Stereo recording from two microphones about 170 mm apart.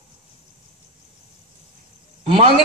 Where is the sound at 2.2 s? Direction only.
35° right (ahead or behind).